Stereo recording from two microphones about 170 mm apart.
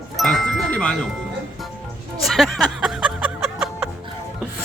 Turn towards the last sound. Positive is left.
turn(degrees=-5)  # may be behind; listen again after turning